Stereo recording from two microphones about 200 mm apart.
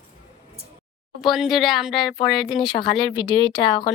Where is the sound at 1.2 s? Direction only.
Centre (ahead or behind).